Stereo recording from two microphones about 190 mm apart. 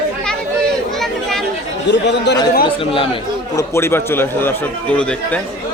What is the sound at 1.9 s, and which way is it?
Speech, 65° left (ahead or behind).